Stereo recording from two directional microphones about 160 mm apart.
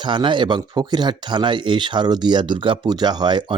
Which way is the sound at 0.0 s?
30° right (ahead or behind).